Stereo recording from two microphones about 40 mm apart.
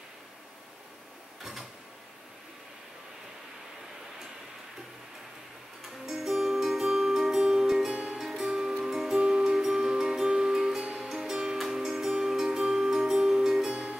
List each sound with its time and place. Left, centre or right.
6.0 s music: centre
8.2 s music: centre
10.8 s music: right
11.1 s music: centre